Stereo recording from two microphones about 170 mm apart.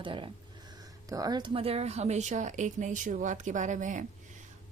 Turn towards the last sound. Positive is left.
turn(degrees=-50)  # may be behind; listen again after turning